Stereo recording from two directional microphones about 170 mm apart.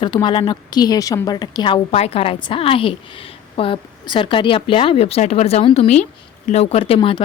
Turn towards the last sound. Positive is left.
turn(degrees=35)  # may be behind; listen again after turning